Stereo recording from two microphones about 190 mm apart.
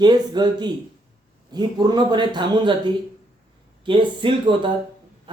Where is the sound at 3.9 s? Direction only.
25° right (ahead or behind).